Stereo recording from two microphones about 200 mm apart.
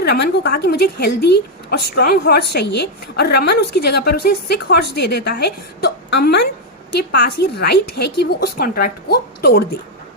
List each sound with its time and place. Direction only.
0.0 s a woman's voice: 55° left (ahead or behind)